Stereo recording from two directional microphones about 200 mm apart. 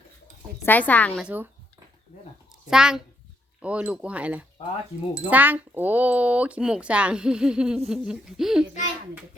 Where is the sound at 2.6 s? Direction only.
5° right (ahead or behind).